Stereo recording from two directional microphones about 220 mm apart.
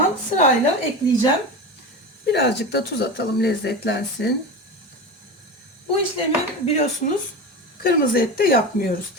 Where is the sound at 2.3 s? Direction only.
50° left (ahead or behind).